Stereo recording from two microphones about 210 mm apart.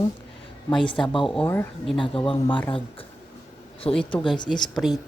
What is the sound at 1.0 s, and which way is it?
Speech, 25° left (ahead or behind).